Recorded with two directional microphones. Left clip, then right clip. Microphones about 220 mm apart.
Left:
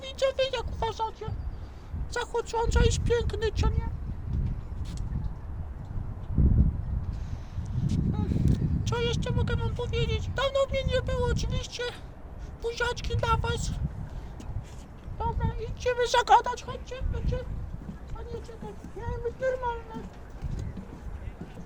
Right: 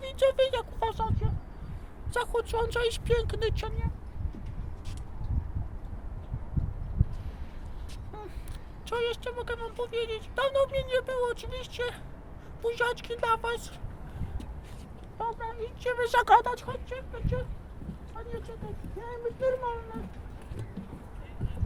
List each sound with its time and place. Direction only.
0.0 s a sound: 10° right (ahead or behind)
2.1 s speech: 25° right (ahead or behind)
7.9 s speech: 5° right (ahead or behind)
15.2 s speech: centre (ahead or behind)
19.0 s speech: 5° left (ahead or behind)